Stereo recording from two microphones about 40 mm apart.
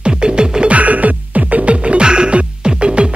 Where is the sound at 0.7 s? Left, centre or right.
Right.